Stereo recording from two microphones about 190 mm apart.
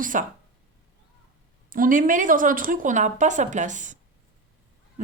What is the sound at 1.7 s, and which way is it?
A woman's voice, 45° right (ahead or behind).